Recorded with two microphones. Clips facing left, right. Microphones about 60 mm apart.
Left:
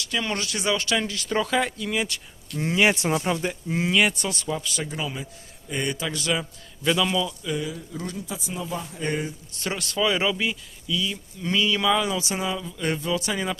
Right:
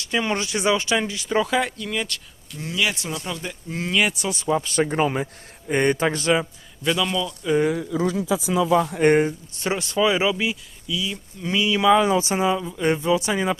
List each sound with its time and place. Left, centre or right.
0.0 s speech: right; by 2.2 s centre
2.6 s speech: left
3.7 s speech: centre
4.4 s speech: right
4.6 s speech: right
6.8 s speech: centre
7.6 s speech: right
8.4 s speech: right
9.6 s speech: right